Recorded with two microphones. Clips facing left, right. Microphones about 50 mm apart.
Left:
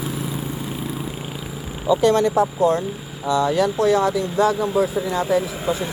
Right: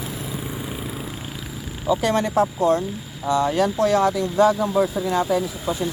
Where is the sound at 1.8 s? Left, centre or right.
Centre.